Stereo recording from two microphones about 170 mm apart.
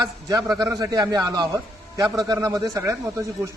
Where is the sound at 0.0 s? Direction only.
20° right (ahead or behind).